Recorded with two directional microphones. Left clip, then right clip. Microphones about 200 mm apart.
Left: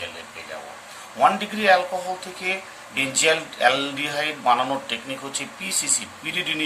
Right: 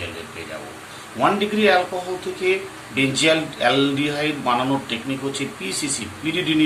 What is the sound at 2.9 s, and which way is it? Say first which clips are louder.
A man's voice: right 2 dB; 40° left (ahead or behind).